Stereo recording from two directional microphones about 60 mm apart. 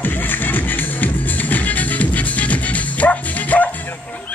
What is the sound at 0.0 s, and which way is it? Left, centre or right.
Music, left.